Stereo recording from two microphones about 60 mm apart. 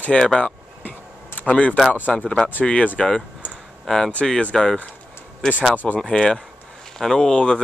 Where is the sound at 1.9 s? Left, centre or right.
Centre.